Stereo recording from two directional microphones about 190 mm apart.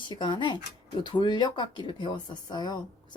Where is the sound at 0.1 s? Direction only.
25° left (ahead or behind).